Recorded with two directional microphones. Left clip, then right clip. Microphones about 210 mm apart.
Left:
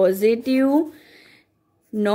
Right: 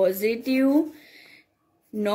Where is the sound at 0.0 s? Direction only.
45° left (ahead or behind).